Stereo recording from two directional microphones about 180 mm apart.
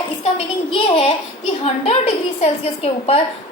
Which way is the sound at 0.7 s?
30° left (ahead or behind).